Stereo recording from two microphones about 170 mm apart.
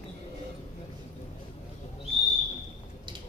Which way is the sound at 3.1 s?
30° right (ahead or behind).